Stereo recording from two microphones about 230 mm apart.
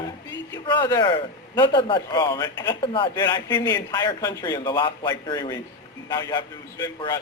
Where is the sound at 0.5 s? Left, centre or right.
Centre.